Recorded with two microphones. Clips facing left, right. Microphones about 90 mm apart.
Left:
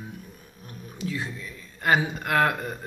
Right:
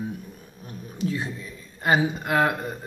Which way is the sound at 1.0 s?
30° right (ahead or behind).